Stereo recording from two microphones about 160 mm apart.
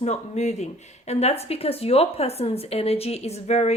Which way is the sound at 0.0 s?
45° left (ahead or behind).